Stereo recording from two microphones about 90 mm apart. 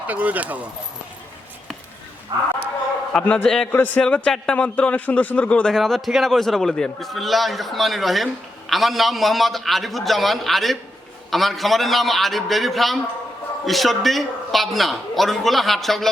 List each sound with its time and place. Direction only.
0.1 s speech: 15° right (ahead or behind)
2.3 s speech: 55° right (ahead or behind)
3.1 s a man's voice: 10° left (ahead or behind)
3.7 s a man's voice: 20° left (ahead or behind)
5.7 s a man's voice: centre (ahead or behind)